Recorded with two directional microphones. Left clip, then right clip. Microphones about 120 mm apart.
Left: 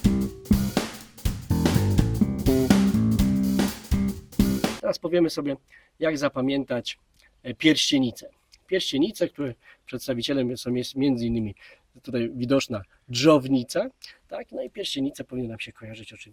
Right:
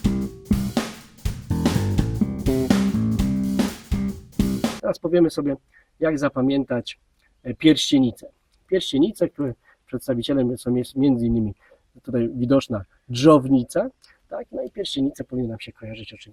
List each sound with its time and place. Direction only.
0.0 s music: centre (ahead or behind)
4.9 s speech: 20° left (ahead or behind)
9.3 s speech: 30° left (ahead or behind)
9.8 s speech: 15° left (ahead or behind)
15.3 s speech: 25° left (ahead or behind)